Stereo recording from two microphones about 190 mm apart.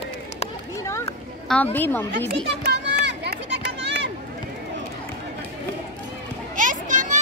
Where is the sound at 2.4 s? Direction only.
65° right (ahead or behind).